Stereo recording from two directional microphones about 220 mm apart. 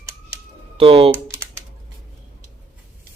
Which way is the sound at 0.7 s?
25° right (ahead or behind).